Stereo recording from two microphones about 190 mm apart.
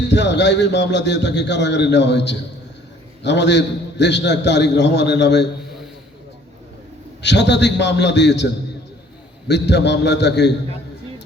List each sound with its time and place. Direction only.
0.1 s a man's voice: 65° left (ahead or behind)
7.2 s a man's voice: 65° left (ahead or behind)
9.5 s a man's voice: 65° left (ahead or behind)